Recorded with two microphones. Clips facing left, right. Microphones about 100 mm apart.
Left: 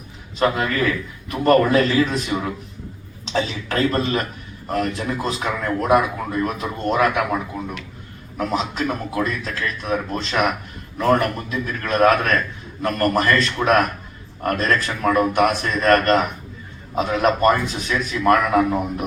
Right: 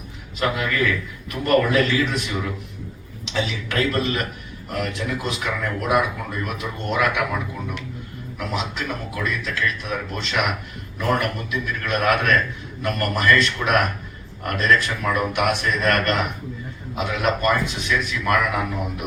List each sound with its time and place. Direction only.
0.3 s a man's voice: 35° left (ahead or behind)
8.4 s a man's voice: 35° left (ahead or behind)